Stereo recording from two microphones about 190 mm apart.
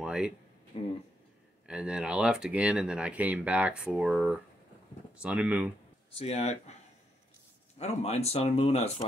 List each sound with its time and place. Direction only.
0.0 s a sound: 5° right (ahead or behind)
0.7 s speech: 30° left (ahead or behind)
1.7 s speech: 5° right (ahead or behind)
6.1 s speech: 35° left (ahead or behind)
7.8 s speech: 35° left (ahead or behind)